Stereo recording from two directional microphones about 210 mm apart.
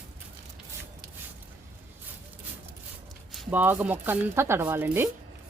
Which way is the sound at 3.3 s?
10° right (ahead or behind).